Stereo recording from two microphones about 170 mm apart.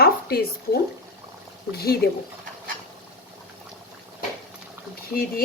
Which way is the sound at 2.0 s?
70° left (ahead or behind).